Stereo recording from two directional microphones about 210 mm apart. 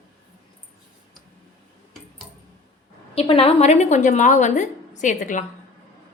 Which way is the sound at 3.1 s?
30° left (ahead or behind).